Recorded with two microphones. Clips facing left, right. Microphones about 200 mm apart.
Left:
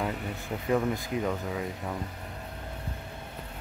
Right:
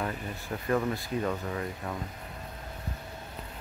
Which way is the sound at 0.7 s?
15° left (ahead or behind).